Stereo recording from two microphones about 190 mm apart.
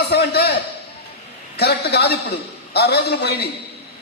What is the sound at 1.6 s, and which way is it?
A man's voice, 60° left (ahead or behind).